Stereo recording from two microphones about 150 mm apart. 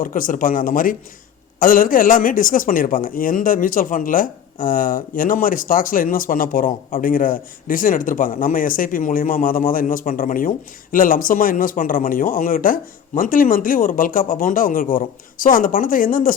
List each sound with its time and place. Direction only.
0.0 s speech: 65° left (ahead or behind)